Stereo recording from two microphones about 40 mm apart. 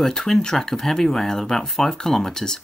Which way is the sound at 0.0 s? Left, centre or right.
Centre.